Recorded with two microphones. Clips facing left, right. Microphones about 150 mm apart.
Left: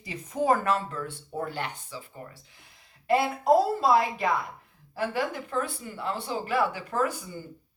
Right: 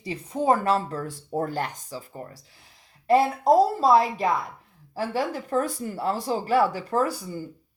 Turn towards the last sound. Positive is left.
turn(degrees=-35)  # may be behind; listen again after turning